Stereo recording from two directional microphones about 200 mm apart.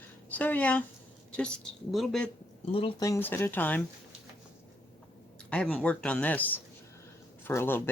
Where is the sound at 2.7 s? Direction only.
20° left (ahead or behind).